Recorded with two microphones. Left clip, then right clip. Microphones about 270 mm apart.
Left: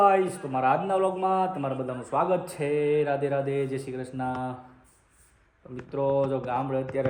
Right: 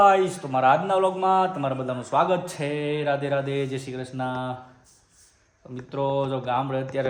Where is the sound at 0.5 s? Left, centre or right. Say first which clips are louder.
Right 4 dB; right.